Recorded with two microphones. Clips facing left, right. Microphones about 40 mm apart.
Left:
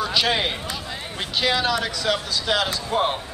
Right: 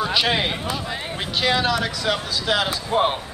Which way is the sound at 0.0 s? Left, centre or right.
Centre.